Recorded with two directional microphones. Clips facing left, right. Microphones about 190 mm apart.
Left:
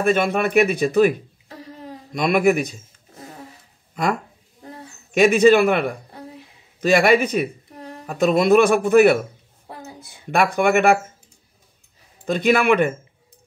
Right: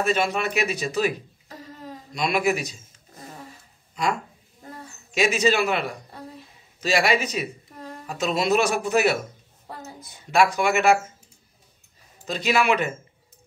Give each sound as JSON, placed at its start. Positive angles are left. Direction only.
{"t": 0.0, "sound": "speech", "side_deg": 55}
{"t": 2.1, "sound": "speech", "side_deg": 50}
{"t": 3.9, "sound": "speech", "side_deg": 55}
{"t": 10.3, "sound": "speech", "side_deg": 55}
{"t": 12.3, "sound": "speech", "side_deg": 55}